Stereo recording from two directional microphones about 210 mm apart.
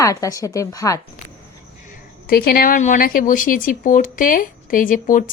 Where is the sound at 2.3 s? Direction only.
45° left (ahead or behind).